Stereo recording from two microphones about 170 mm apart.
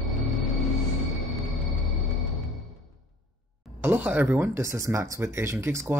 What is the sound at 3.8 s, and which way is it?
Speech, 10° right (ahead or behind).